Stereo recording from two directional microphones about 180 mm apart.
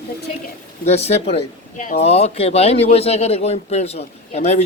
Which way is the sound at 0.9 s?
35° left (ahead or behind).